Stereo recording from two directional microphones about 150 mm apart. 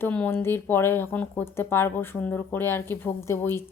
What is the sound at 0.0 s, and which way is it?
Speech, 10° left (ahead or behind).